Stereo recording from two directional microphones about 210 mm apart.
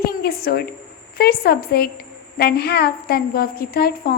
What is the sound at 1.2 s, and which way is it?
A woman's voice, 45° left (ahead or behind).